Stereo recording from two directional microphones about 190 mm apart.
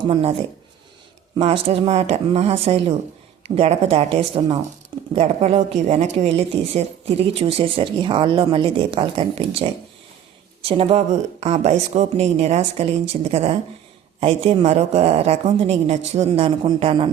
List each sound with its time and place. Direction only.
0.0 s speech: 25° right (ahead or behind)
1.4 s a woman's voice: 30° right (ahead or behind)